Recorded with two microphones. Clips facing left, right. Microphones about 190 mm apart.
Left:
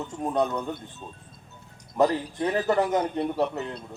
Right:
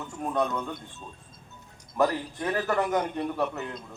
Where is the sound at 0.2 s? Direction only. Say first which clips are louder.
Left 2 dB; 20° left (ahead or behind).